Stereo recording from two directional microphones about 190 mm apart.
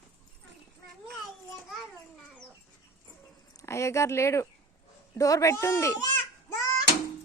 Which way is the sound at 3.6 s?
15° left (ahead or behind).